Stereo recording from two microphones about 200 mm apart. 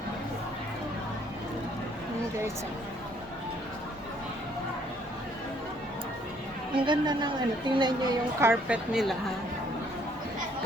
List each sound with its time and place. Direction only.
6.8 s a woman's voice: 20° right (ahead or behind); by 9.1 s 5° right (ahead or behind)